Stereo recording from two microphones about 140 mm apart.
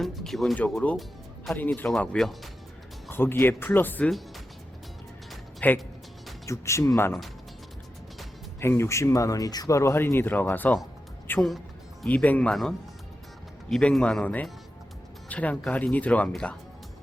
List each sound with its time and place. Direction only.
0.0 s speech: centre (ahead or behind)
1.9 s speech: centre (ahead or behind)
3.1 s speech: 15° left (ahead or behind)
5.3 s music: 5° left (ahead or behind)
6.4 s speech: 20° left (ahead or behind)
8.6 s speech: 20° left (ahead or behind)
11.3 s speech: centre (ahead or behind)
12.0 s speech: 10° left (ahead or behind)